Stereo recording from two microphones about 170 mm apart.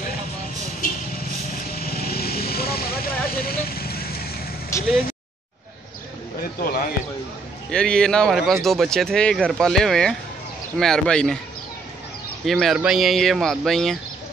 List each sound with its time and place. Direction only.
1.7 s vehicle: 65° left (ahead or behind)
4.7 s vehicle: 15° left (ahead or behind)
7.7 s speech: 5° left (ahead or behind)
12.4 s speech: centre (ahead or behind)